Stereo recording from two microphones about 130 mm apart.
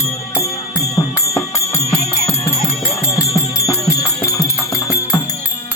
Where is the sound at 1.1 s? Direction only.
25° left (ahead or behind).